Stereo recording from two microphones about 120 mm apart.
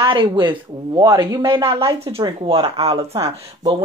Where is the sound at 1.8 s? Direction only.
30° right (ahead or behind).